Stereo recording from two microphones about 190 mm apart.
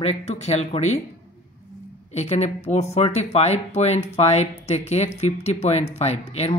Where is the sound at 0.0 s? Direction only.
35° left (ahead or behind).